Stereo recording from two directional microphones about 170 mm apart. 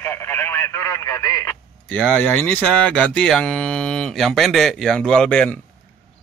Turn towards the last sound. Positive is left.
turn(degrees=5)  # may be behind; listen again after turning